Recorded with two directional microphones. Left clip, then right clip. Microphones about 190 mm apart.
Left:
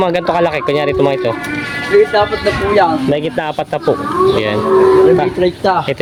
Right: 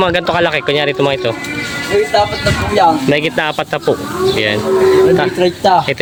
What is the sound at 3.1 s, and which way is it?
A man's voice, 5° right (ahead or behind).